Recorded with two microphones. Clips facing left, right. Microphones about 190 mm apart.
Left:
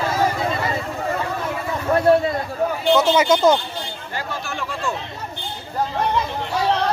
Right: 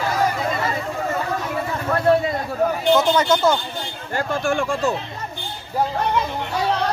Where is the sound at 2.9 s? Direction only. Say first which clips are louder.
Left 4 dB; 10° left (ahead or behind).